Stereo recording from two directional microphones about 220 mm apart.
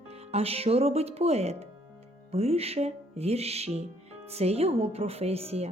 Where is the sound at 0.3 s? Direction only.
25° right (ahead or behind).